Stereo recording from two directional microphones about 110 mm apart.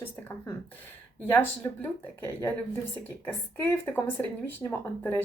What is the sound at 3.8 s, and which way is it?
Speech, 20° left (ahead or behind).